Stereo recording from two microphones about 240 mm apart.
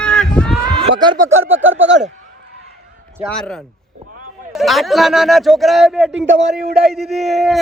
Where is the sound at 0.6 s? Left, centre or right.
Centre.